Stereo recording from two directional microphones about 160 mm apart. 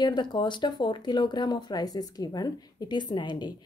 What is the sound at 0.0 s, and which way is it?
A woman's voice, 30° left (ahead or behind).